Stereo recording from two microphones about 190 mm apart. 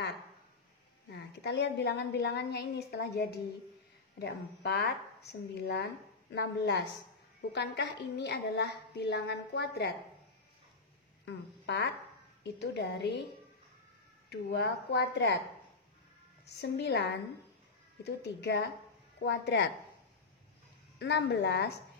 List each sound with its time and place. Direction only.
1.1 s a woman's voice: 65° left (ahead or behind)
11.2 s a woman's voice: 65° left (ahead or behind)
14.3 s a woman's voice: 60° left (ahead or behind)
16.4 s a woman's voice: 60° left (ahead or behind)
21.0 s a woman's voice: 65° left (ahead or behind)